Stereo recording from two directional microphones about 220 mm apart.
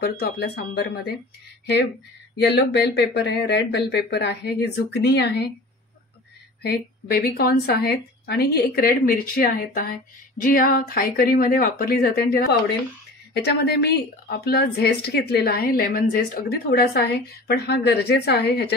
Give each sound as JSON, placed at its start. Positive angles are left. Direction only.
{"t": 0.0, "sound": "a woman's voice", "side_deg": 50}
{"t": 2.3, "sound": "a woman's voice", "side_deg": 50}
{"t": 6.6, "sound": "a woman's voice", "side_deg": 45}